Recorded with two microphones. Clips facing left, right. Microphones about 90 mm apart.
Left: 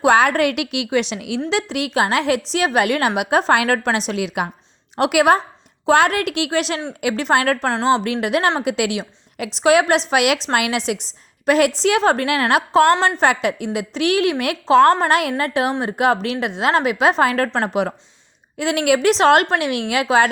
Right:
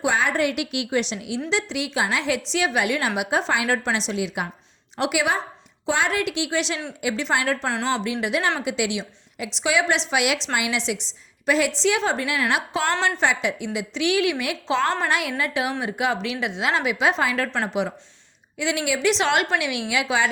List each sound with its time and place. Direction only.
0.0 s a woman's voice: 60° left (ahead or behind); by 1.4 s 85° left
1.5 s a woman's voice: 55° left (ahead or behind)
4.9 s a woman's voice: 55° left (ahead or behind)